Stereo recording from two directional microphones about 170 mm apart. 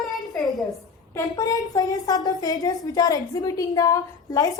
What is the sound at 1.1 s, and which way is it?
A woman's voice, 20° left (ahead or behind).